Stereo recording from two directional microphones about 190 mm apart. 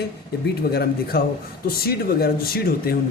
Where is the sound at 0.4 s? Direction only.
55° left (ahead or behind).